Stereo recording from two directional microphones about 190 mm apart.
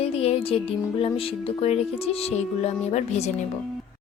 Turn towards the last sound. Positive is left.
turn(degrees=35)  # may be behind; listen again after turning